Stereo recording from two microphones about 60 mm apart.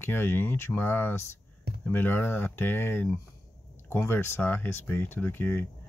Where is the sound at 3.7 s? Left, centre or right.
Left.